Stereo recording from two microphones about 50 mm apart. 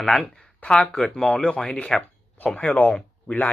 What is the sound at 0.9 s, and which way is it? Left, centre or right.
Speech, centre.